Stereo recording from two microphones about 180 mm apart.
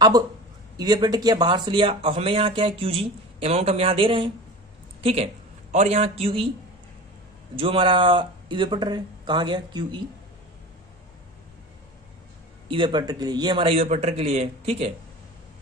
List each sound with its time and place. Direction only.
0.7 s a man's voice: 20° right (ahead or behind)
7.5 s speech: 30° right (ahead or behind)
12.6 s speech: 30° right (ahead or behind)